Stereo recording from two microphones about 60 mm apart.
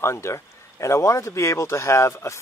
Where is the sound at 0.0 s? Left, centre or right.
Left.